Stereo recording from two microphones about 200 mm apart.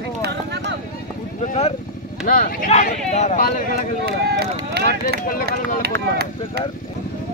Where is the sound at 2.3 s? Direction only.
45° left (ahead or behind).